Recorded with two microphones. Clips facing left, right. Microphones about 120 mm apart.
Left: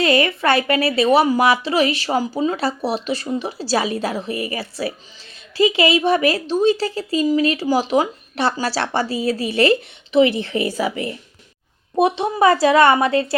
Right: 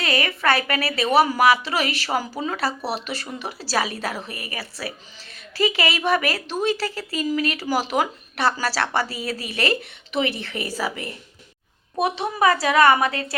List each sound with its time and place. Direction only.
0.0 s a woman's voice: 30° left (ahead or behind)
11.9 s a woman's voice: 25° left (ahead or behind)